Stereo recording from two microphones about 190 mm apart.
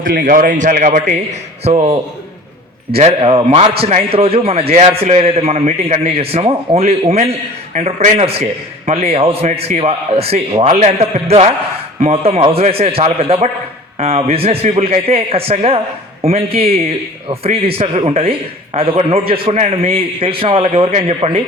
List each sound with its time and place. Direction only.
0.0 s a man's voice: 45° right (ahead or behind); by 21.4 s 30° right (ahead or behind)